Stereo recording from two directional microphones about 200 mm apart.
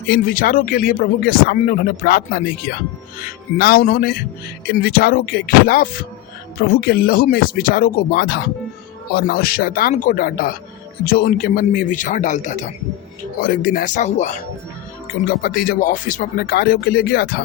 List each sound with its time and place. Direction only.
0.1 s speech: 45° left (ahead or behind)
15.4 s speech: 45° left (ahead or behind)